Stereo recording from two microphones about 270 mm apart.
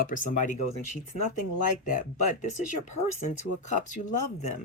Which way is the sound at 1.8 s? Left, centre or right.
Left.